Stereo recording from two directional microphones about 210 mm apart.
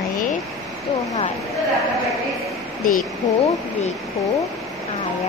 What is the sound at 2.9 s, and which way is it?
A woman's voice, 35° left (ahead or behind).